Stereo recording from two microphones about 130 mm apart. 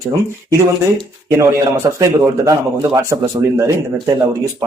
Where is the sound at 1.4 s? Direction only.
25° right (ahead or behind).